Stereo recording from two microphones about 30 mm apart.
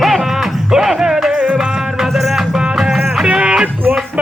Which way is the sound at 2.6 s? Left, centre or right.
Right.